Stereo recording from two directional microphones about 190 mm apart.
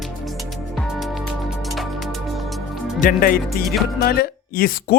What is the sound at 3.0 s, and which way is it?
Speech, 45° left (ahead or behind).